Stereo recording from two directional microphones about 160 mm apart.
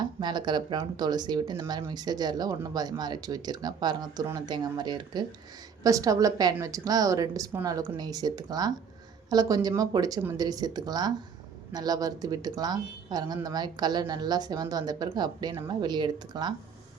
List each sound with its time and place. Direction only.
0.0 s speech: 25° right (ahead or behind)